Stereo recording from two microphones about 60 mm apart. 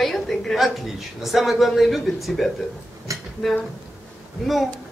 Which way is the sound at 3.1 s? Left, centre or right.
Right.